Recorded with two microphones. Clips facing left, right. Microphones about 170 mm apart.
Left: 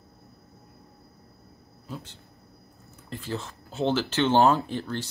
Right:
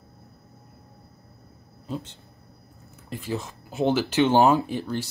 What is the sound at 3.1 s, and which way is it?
Speech, 10° right (ahead or behind).